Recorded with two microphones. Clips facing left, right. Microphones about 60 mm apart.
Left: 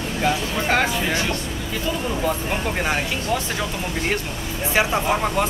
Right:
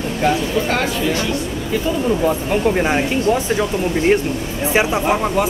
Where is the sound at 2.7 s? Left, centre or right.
Centre.